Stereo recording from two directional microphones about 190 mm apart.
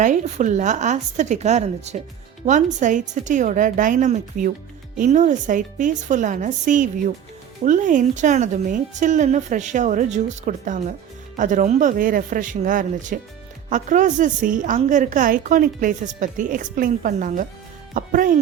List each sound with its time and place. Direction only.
0.0 s a woman's voice: 40° right (ahead or behind)